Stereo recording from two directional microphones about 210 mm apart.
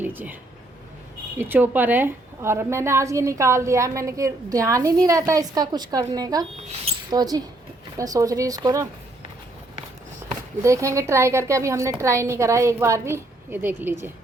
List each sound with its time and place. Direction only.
0.0 s speech: 10° right (ahead or behind)
1.4 s a woman's voice: 10° right (ahead or behind)
10.6 s a woman's voice: 15° right (ahead or behind)